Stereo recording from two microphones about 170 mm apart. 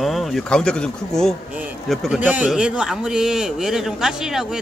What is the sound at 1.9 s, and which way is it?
A man's voice, 5° right (ahead or behind).